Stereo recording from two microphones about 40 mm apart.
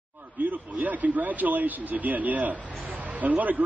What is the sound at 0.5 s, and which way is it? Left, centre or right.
Speech, right.